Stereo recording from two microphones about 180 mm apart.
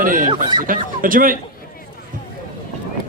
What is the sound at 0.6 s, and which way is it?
Speech, 50° right (ahead or behind).